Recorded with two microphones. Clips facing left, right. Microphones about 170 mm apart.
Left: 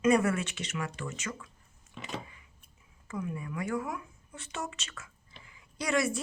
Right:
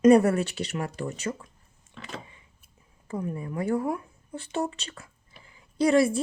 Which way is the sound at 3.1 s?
35° right (ahead or behind).